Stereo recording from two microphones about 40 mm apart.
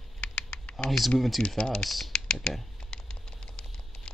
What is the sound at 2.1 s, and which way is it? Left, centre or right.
Computer keyboard, centre.